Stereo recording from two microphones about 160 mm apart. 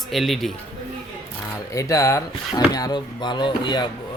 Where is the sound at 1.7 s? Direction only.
20° left (ahead or behind).